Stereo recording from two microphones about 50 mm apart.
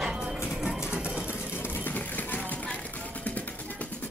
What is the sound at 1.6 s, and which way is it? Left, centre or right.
Music, left.